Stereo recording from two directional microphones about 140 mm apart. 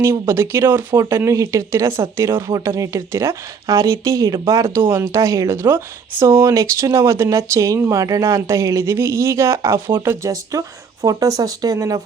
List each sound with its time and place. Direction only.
0.0 s speech: 15° right (ahead or behind)